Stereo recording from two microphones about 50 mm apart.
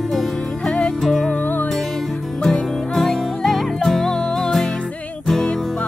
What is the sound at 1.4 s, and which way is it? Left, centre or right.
Music, left.